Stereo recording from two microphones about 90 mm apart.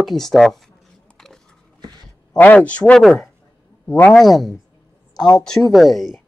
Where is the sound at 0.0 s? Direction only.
5° left (ahead or behind).